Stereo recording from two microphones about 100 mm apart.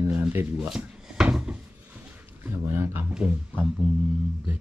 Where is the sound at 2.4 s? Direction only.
25° right (ahead or behind).